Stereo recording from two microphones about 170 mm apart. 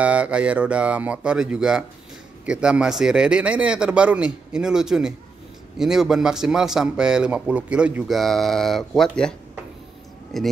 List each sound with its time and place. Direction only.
0.0 s a man's voice: 5° right (ahead or behind)
10.3 s a man's voice: centre (ahead or behind)